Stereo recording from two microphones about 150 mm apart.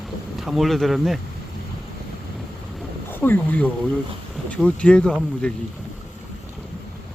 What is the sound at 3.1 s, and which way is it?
Speech, 15° left (ahead or behind).